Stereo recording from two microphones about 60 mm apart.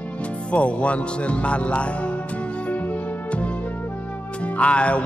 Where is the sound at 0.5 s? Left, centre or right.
Left.